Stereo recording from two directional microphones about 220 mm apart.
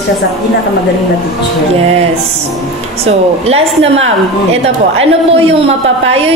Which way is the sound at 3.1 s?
30° right (ahead or behind).